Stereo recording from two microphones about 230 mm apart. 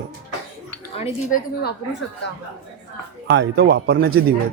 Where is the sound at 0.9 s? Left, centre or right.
Left.